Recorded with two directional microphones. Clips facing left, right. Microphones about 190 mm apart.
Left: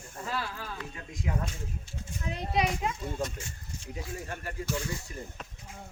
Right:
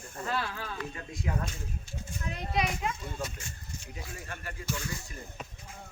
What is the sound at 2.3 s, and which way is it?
Speech, 30° left (ahead or behind).